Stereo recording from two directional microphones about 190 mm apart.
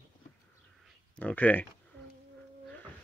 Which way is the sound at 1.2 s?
10° left (ahead or behind).